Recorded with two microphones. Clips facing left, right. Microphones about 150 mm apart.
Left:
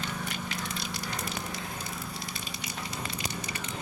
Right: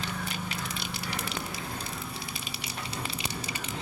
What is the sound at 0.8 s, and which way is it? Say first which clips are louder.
Fire: even; 30° right (ahead or behind).